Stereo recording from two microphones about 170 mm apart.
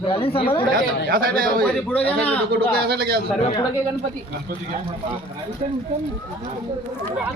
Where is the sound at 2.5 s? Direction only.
70° right (ahead or behind).